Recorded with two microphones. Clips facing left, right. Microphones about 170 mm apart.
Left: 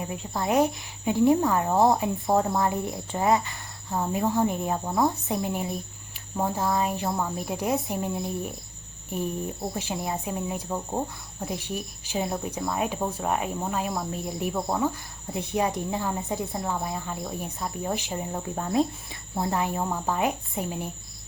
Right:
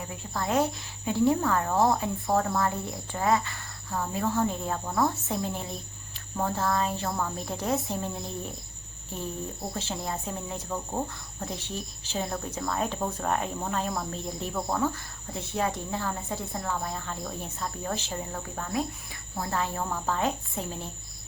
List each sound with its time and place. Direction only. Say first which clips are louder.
0.0 s speech: left 3 dB; 20° left (ahead or behind)